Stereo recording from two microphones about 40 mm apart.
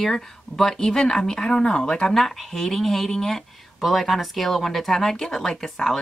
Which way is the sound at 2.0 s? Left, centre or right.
Centre.